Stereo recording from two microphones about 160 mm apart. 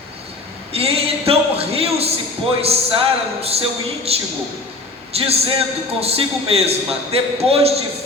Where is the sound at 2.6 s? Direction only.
40° right (ahead or behind).